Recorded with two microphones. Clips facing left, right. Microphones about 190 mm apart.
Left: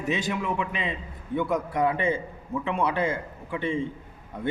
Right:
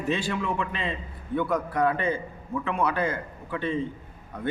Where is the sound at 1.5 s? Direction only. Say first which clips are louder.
Even; 20° left (ahead or behind).